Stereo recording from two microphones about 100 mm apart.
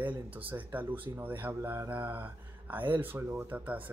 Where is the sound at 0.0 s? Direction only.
15° right (ahead or behind).